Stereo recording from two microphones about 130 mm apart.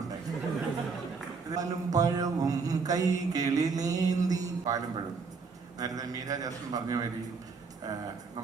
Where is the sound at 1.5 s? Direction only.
25° right (ahead or behind).